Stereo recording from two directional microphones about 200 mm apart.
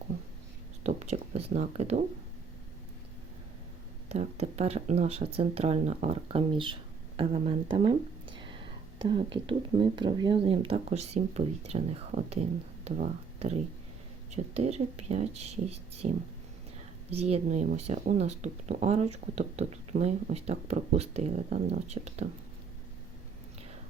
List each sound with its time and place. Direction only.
0.9 s speech: 35° right (ahead or behind)
4.1 s speech: 30° right (ahead or behind)